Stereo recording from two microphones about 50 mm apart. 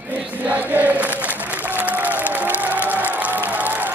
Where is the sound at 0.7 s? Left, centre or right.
Right.